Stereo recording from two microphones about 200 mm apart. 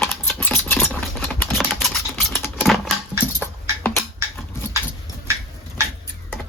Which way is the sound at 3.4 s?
10° left (ahead or behind).